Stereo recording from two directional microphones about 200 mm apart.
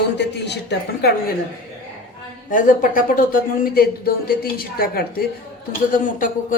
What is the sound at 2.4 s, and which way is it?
Speech, 40° left (ahead or behind).